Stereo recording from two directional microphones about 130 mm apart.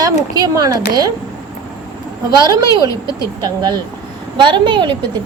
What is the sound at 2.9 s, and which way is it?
Speech, 30° left (ahead or behind).